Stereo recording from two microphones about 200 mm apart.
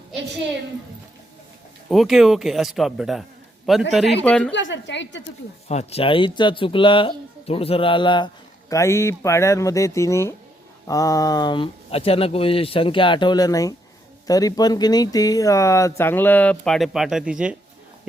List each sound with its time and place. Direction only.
1.9 s speech: centre (ahead or behind)
4.5 s a woman's voice: 65° left (ahead or behind)
5.6 s speech: 30° left (ahead or behind); by 17.6 s 5° right (ahead or behind)